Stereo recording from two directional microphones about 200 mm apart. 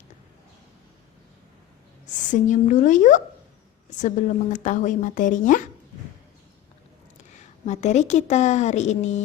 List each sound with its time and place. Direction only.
2.3 s a woman's voice: 40° left (ahead or behind)
7.3 s a woman's voice: 35° left (ahead or behind)